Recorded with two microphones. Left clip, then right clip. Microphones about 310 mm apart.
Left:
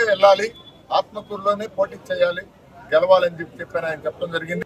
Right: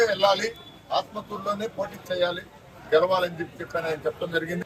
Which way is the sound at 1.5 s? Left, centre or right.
Centre.